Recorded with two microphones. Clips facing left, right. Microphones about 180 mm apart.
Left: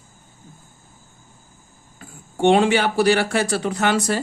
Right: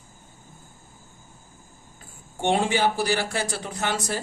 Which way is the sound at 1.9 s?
75° left (ahead or behind).